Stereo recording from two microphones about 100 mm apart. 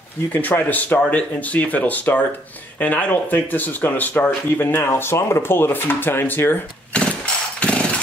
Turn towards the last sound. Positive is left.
turn(degrees=10)  # may be behind; listen again after turning